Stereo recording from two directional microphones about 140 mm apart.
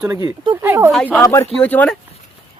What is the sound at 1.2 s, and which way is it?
Speech, 20° left (ahead or behind).